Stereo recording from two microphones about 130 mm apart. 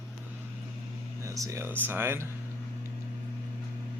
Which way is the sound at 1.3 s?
25° right (ahead or behind).